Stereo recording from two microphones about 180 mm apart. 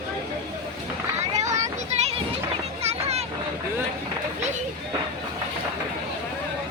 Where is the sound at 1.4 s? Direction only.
40° right (ahead or behind).